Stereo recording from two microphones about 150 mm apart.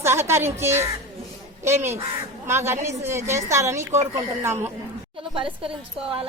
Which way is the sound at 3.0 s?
15° right (ahead or behind).